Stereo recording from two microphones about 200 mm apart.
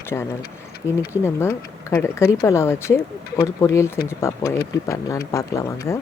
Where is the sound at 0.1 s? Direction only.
10° left (ahead or behind).